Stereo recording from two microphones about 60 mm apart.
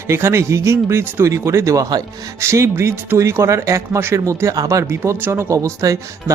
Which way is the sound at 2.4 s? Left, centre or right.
Right.